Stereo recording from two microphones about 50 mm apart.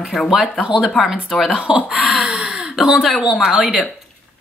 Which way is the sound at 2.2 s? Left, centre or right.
Right.